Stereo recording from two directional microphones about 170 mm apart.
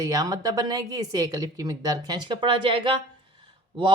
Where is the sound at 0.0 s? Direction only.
20° right (ahead or behind).